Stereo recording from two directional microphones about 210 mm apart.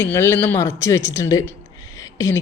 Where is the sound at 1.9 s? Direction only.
15° left (ahead or behind).